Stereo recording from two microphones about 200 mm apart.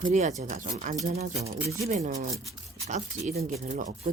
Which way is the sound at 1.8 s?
35° right (ahead or behind).